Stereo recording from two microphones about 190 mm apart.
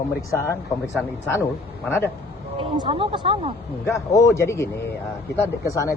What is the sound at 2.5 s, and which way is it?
Speech, 25° right (ahead or behind).